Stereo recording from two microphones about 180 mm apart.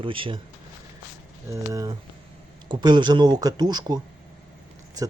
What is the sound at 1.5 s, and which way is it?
Speech, 20° right (ahead or behind).